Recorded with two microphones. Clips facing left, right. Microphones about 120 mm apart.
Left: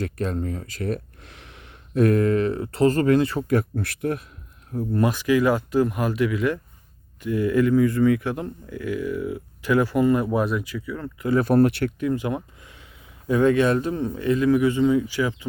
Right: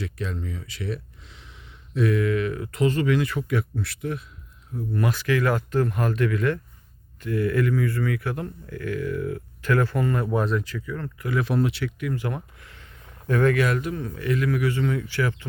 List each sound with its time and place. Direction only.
0.0 s speech: 45° left (ahead or behind)
3.4 s speech: 45° left (ahead or behind)
4.9 s speech: 15° left (ahead or behind)
11.2 s speech: 30° left (ahead or behind)
11.4 s speech: 50° left (ahead or behind)
12.1 s speech: 20° left (ahead or behind)